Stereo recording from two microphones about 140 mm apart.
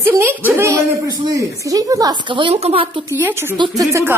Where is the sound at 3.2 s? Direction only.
15° right (ahead or behind).